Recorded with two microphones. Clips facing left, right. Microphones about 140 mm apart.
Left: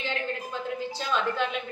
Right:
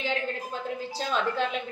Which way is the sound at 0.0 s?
35° right (ahead or behind).